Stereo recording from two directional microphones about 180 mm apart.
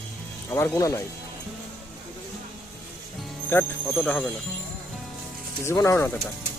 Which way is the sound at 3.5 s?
10° left (ahead or behind).